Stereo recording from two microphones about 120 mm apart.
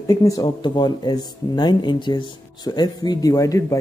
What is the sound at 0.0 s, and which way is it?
Speech, 30° left (ahead or behind).